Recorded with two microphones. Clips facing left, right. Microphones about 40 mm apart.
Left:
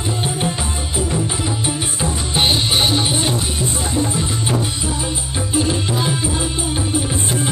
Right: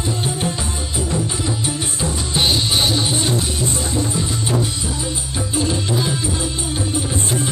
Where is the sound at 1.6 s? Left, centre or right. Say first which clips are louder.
Left 1 dB; centre.